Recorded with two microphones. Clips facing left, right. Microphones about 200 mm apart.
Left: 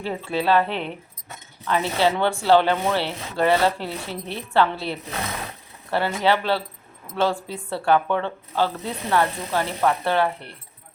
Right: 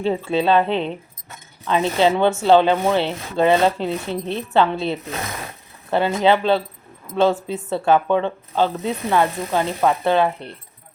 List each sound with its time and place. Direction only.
0.0 s speech: 25° right (ahead or behind)